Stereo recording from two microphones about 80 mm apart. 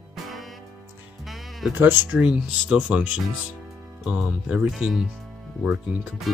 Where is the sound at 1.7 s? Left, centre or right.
Right.